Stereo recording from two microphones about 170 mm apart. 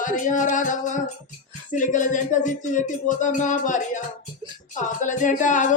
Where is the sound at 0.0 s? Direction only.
50° left (ahead or behind).